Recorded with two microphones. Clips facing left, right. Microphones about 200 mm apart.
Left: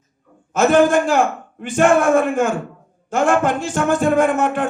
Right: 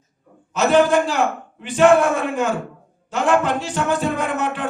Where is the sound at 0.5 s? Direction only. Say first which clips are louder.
Left 2 dB; 50° left (ahead or behind).